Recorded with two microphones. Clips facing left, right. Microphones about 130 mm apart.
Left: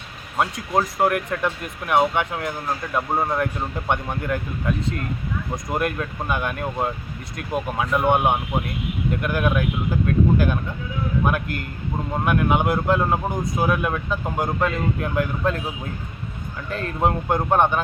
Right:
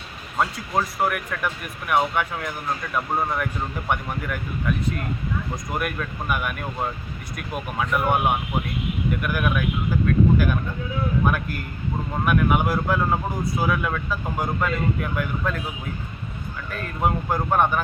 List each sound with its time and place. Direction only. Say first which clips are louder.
0.3 s speech: left 2 dB; 20° left (ahead or behind)
5.7 s speech: left 4 dB; 25° left (ahead or behind)
16.7 s speech: left 2 dB; 25° left (ahead or behind)